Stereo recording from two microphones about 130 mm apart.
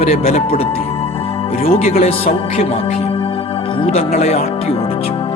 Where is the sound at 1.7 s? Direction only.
55° left (ahead or behind).